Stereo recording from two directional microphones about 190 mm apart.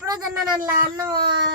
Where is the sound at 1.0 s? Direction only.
20° right (ahead or behind).